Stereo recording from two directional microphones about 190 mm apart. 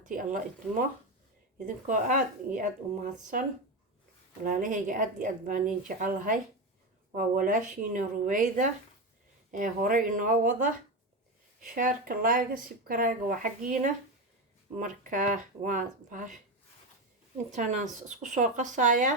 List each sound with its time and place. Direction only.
0.0 s speech: 45° right (ahead or behind)
4.4 s speech: 45° right (ahead or behind)
17.5 s speech: 40° right (ahead or behind)